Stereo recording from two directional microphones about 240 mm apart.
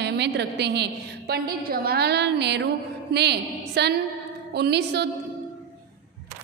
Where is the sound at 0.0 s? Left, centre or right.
Right.